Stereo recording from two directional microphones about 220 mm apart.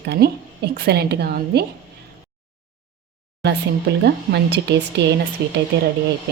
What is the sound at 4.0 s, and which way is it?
A woman's voice, 50° right (ahead or behind).